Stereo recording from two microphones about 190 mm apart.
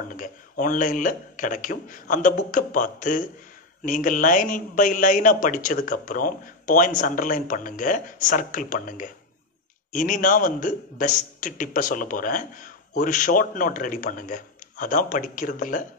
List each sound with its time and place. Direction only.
0.1 s a man's voice: 45° left (ahead or behind)